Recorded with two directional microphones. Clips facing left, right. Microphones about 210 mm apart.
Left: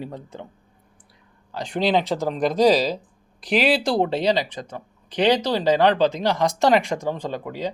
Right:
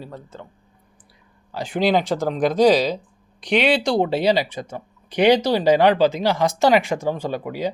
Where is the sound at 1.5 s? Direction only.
5° right (ahead or behind).